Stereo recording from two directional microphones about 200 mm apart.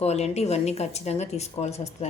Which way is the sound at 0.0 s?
30° left (ahead or behind).